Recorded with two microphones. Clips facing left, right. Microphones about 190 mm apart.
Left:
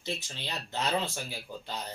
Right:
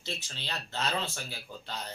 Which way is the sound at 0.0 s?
15° left (ahead or behind).